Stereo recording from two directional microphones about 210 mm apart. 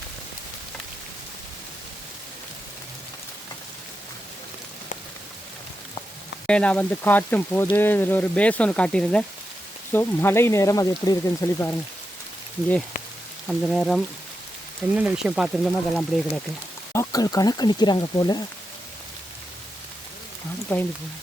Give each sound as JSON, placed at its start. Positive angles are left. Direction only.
{"t": 6.5, "sound": "speech", "side_deg": 5}
{"t": 13.5, "sound": "speech", "side_deg": 0}
{"t": 16.9, "sound": "speech", "side_deg": 15}
{"t": 20.7, "sound": "speech", "side_deg": 10}